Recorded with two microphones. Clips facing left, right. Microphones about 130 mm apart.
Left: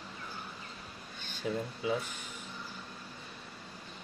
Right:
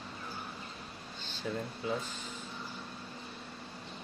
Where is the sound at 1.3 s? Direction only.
10° left (ahead or behind).